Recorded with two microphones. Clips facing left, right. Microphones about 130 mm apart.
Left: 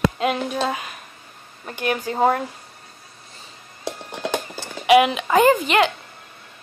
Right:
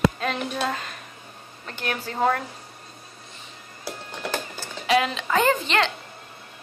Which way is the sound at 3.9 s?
20° left (ahead or behind).